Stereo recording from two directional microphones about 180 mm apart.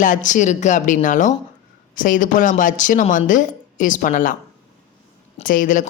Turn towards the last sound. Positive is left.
turn(degrees=45)  # may be behind; listen again after turning